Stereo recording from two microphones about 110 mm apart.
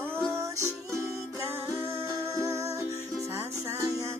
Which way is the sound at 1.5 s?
25° right (ahead or behind).